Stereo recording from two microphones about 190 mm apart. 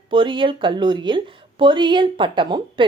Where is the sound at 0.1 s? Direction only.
25° right (ahead or behind).